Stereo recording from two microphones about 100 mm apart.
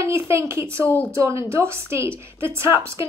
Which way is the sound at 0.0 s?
30° right (ahead or behind).